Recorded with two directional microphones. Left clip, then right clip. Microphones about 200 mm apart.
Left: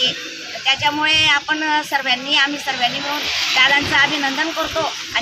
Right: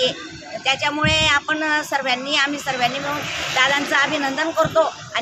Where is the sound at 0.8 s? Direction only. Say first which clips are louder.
Left 3 dB; 20° right (ahead or behind).